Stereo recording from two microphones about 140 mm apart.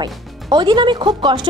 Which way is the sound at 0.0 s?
30° right (ahead or behind).